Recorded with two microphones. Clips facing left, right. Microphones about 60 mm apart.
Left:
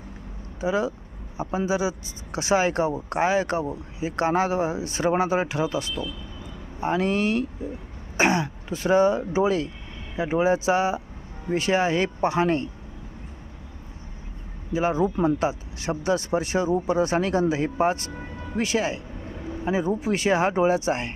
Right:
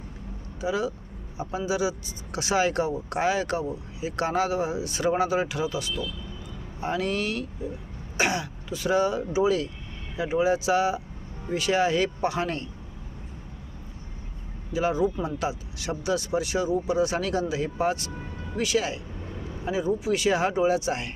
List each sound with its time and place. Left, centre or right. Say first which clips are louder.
0.6 s speech: left 3 dB; left
14.7 s speech: left 2 dB; left